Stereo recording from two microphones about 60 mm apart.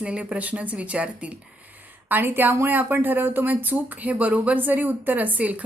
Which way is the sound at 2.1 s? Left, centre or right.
Right.